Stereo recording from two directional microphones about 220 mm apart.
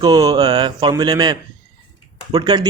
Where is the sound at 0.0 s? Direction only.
15° right (ahead or behind).